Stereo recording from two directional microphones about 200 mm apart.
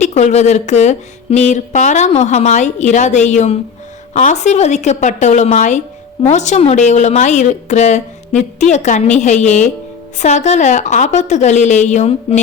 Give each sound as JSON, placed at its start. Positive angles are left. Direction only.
{"t": 0.0, "sound": "speech", "side_deg": 35}